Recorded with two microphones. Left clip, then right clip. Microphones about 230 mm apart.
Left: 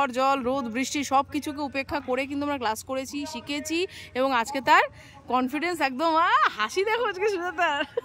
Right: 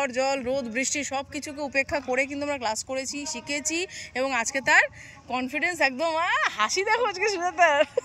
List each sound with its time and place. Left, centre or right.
0.0 s a woman's voice: centre